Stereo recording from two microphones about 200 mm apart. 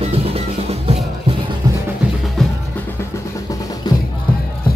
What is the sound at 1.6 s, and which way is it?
Music, 20° right (ahead or behind).